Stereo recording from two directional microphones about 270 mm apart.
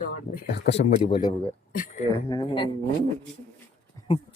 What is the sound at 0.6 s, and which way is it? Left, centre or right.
Speech, left.